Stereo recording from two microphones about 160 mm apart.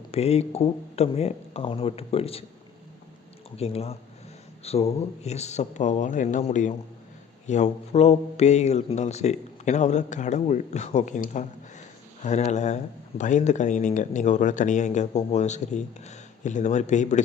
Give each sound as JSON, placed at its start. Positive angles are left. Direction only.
{"t": 0.1, "sound": "speech", "side_deg": 40}
{"t": 3.6, "sound": "speech", "side_deg": 40}